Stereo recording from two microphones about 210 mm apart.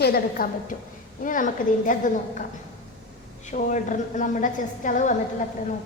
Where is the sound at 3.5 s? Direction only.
35° left (ahead or behind).